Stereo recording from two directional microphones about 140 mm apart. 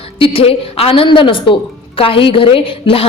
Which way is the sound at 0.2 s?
45° left (ahead or behind).